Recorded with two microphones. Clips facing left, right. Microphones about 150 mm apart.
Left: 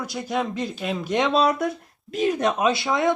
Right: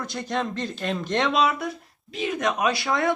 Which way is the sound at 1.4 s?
40° left (ahead or behind).